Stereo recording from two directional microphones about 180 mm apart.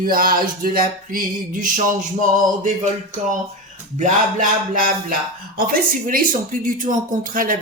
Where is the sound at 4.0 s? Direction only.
45° right (ahead or behind).